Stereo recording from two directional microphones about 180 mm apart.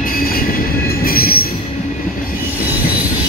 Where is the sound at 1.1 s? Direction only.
55° left (ahead or behind).